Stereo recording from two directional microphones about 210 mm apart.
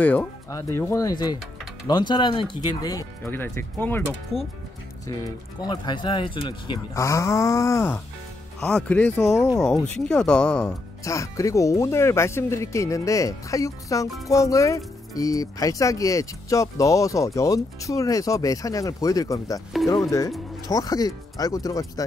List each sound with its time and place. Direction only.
0.0 s speech: 10° left (ahead or behind)
5.6 s speech: 20° left (ahead or behind)
11.1 s speech: 15° left (ahead or behind)